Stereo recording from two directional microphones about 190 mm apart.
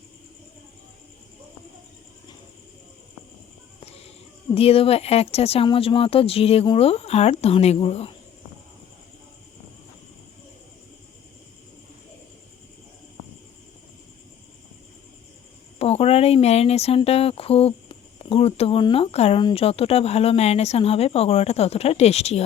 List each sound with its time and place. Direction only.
3.8 s a sound: 30° left (ahead or behind)
4.5 s speech: 30° left (ahead or behind)
15.8 s speech: 30° left (ahead or behind)